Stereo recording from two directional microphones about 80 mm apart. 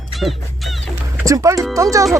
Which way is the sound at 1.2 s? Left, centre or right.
Right.